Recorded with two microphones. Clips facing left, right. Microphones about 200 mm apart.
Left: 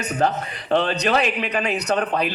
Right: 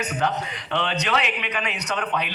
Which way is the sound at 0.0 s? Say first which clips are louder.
Left 3 dB; 35° left (ahead or behind).